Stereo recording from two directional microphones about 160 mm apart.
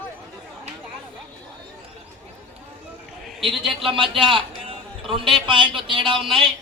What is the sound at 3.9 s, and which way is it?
A man's voice, 35° right (ahead or behind).